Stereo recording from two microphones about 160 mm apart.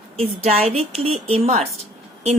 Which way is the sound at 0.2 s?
40° right (ahead or behind).